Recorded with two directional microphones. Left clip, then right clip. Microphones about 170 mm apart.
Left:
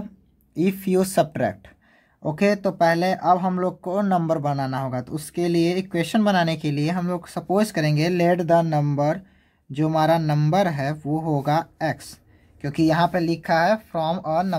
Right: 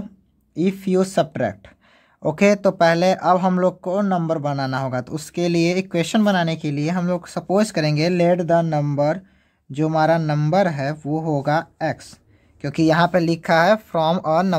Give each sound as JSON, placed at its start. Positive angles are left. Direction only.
{"t": 0.6, "sound": "speech", "side_deg": -20}
{"t": 2.2, "sound": "speech", "side_deg": -35}